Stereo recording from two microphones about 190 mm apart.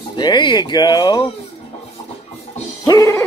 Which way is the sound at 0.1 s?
25° left (ahead or behind).